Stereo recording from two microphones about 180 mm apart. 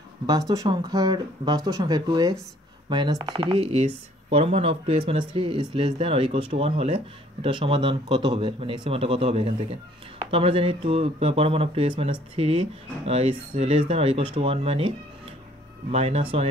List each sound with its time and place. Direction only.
0.3 s speech: 20° right (ahead or behind)